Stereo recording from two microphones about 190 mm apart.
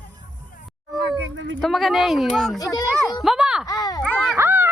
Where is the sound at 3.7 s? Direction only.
20° left (ahead or behind).